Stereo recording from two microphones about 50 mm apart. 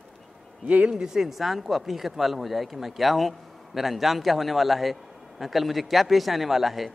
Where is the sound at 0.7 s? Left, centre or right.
Right.